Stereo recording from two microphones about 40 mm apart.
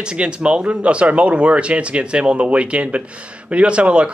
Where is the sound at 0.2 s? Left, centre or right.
Right.